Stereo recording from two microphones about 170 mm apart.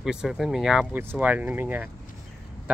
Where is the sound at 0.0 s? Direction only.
5° right (ahead or behind).